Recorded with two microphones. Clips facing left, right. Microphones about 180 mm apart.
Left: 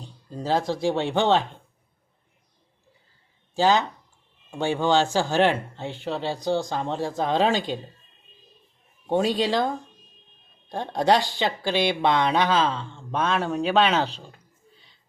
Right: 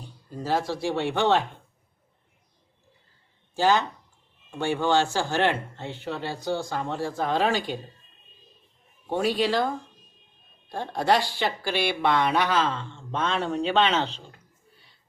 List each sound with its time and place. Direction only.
0.6 s speech: 15° left (ahead or behind)
3.5 s speech: 15° left (ahead or behind)
9.0 s speech: 20° left (ahead or behind)
10.7 s speech: 20° left (ahead or behind)